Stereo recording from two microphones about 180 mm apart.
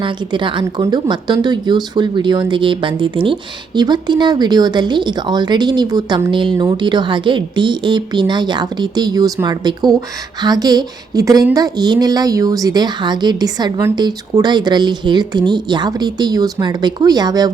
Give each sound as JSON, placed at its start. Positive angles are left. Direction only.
{"t": 0.0, "sound": "speech", "side_deg": -25}